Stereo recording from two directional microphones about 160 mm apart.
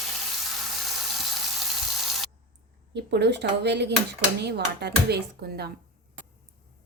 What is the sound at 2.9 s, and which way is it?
Speech, 90° right.